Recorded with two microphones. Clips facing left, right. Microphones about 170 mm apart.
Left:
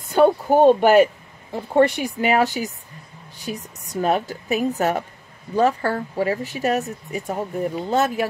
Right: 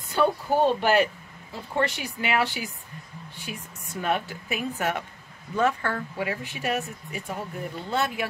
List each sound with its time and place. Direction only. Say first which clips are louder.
0.1 s a woman's voice: left 8 dB; 45° left (ahead or behind)